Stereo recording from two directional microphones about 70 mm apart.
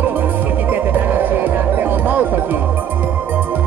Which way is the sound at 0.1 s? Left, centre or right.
Right.